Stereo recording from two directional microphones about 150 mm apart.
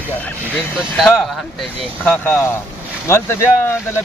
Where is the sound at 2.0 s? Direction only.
10° left (ahead or behind).